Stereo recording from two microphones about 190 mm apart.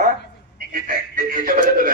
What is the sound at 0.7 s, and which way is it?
Speech, 45° right (ahead or behind).